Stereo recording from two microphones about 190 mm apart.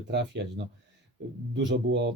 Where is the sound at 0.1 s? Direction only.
65° right (ahead or behind).